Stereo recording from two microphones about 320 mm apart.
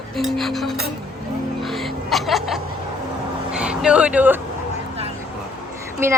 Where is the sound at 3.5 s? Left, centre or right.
Centre.